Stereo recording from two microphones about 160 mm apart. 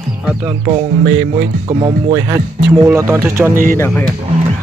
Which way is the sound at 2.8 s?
15° right (ahead or behind).